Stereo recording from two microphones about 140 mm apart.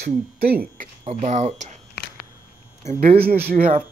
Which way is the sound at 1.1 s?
55° right (ahead or behind).